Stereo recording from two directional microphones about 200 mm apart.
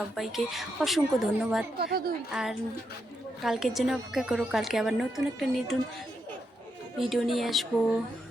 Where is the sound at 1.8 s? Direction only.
50° right (ahead or behind).